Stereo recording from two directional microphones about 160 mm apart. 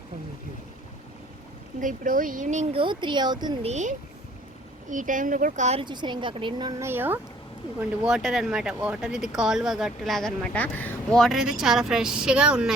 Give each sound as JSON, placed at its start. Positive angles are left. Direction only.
{"t": 1.8, "sound": "speech", "side_deg": -55}
{"t": 2.7, "sound": "a woman's voice", "side_deg": -30}
{"t": 3.6, "sound": "speech", "side_deg": -45}
{"t": 5.8, "sound": "a woman's voice", "side_deg": -30}
{"t": 6.8, "sound": "speech", "side_deg": -15}